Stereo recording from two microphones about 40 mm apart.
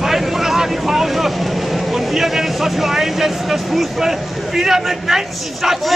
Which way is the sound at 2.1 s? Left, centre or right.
Centre.